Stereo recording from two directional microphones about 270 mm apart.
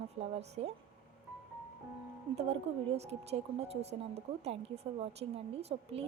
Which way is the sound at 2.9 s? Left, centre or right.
Right.